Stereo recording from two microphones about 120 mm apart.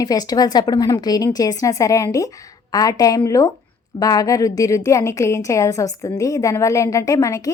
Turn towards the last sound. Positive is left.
turn(degrees=30)  # may be behind; listen again after turning